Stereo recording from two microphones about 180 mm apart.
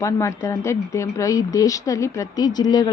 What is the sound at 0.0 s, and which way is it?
A woman's voice, 15° left (ahead or behind).